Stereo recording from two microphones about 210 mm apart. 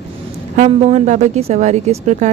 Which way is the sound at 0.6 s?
30° right (ahead or behind).